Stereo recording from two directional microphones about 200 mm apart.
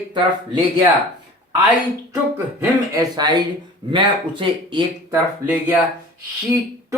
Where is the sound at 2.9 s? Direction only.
20° right (ahead or behind).